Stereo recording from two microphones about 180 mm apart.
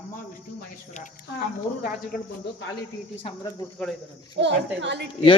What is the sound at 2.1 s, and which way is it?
Speech, 50° left (ahead or behind).